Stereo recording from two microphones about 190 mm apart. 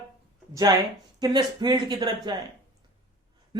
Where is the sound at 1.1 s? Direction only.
20° right (ahead or behind).